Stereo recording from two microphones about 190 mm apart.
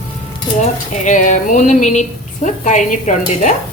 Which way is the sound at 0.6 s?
40° left (ahead or behind).